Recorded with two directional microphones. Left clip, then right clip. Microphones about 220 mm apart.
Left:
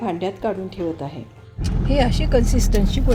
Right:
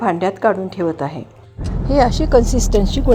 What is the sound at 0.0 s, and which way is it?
A woman's voice, 10° right (ahead or behind).